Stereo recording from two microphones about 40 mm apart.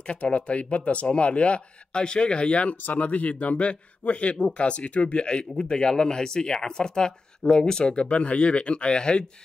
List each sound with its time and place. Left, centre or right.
0.0 s speech: left
2.9 s speech: left